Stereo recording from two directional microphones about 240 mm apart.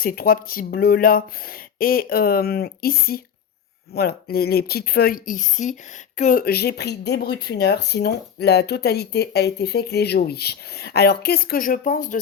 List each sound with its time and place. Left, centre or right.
0.0 s speech: left